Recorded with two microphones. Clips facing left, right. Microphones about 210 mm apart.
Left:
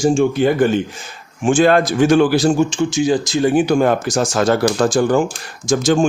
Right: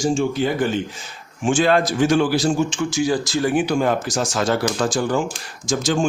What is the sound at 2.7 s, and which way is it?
Speech, 25° left (ahead or behind).